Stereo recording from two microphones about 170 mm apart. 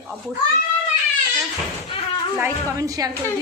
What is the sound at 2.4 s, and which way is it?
Speech, 20° right (ahead or behind).